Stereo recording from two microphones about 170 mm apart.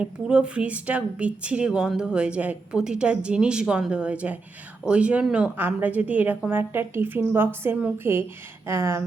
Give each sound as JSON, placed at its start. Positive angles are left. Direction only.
{"t": 0.0, "sound": "a woman's voice", "side_deg": -5}